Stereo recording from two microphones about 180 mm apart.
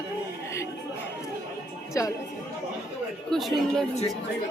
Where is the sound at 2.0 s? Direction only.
15° left (ahead or behind).